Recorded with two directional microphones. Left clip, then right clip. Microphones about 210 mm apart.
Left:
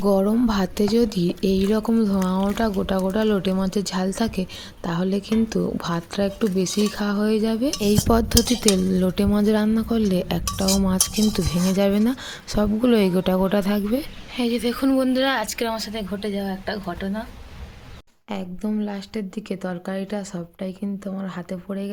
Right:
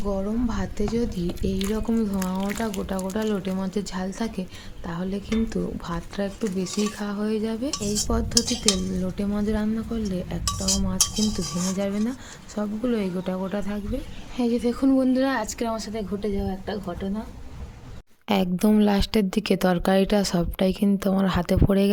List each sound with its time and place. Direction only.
0.0 s speech: 35° left (ahead or behind)
7.8 s cutlery: 50° left (ahead or behind)
14.3 s speech: 5° left (ahead or behind)
18.3 s speech: 45° right (ahead or behind)